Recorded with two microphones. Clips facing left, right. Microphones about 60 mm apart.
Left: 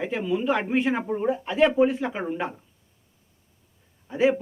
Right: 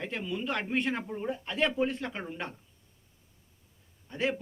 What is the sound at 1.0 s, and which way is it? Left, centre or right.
Speech, centre.